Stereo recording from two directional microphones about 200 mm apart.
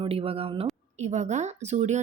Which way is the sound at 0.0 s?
30° right (ahead or behind).